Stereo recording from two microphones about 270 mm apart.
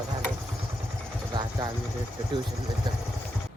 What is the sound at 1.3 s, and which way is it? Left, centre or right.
Speech, centre.